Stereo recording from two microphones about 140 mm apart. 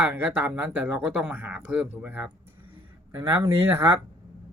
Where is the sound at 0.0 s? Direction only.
15° right (ahead or behind).